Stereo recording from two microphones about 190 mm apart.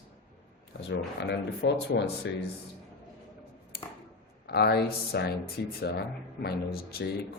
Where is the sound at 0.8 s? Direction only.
65° left (ahead or behind).